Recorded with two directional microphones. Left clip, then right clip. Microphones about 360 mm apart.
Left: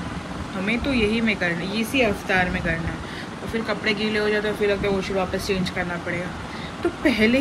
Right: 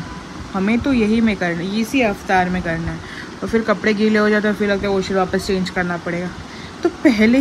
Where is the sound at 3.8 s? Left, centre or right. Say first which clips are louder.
Right 6 dB; right.